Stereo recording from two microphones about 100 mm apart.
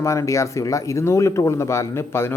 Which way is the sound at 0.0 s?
30° left (ahead or behind).